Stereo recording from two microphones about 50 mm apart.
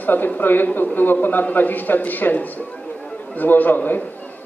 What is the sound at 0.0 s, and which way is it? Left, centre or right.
A man's voice, left.